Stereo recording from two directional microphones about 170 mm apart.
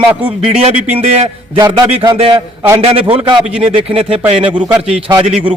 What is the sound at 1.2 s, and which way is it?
A man's voice, 25° right (ahead or behind).